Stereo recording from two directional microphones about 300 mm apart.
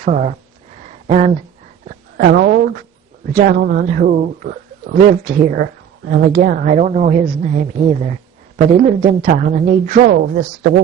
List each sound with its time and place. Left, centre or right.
0.0 s a man's voice: right
0.9 s a sound: right
2.1 s a man's voice: right